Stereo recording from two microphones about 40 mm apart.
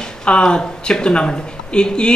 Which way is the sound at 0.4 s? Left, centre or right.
Centre.